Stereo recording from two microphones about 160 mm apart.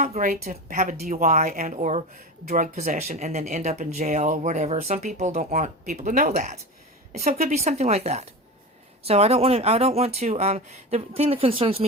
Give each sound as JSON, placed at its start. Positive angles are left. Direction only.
{"t": 0.0, "sound": "speech", "side_deg": -55}